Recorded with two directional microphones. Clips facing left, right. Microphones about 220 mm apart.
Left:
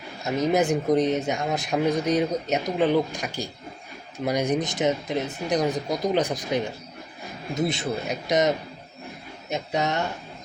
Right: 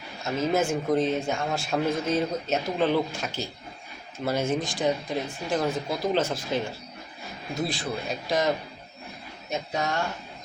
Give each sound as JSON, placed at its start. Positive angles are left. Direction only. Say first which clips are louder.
{"t": 0.3, "sound": "a man's voice", "louder": "left 3 dB", "side_deg": 15}